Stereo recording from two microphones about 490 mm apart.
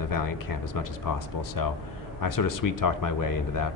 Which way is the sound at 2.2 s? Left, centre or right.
Left.